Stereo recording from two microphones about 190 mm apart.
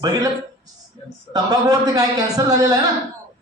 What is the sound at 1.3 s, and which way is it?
Speech, 20° right (ahead or behind).